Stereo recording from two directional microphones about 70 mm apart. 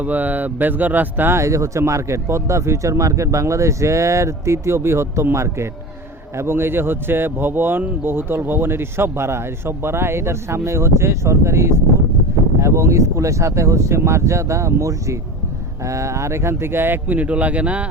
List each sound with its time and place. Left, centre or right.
0.0 s speech: right
1.4 s a man's voice: right; by 17.8 s centre